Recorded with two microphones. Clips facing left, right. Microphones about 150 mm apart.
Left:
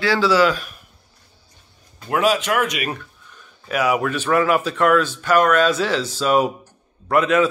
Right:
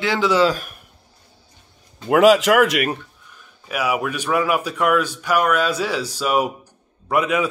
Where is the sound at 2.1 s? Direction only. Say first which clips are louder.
Right 6 dB; 90° right.